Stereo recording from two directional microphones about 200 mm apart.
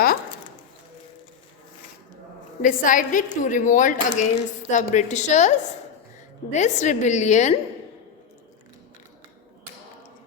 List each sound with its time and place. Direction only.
2.6 s a woman's voice: 40° left (ahead or behind)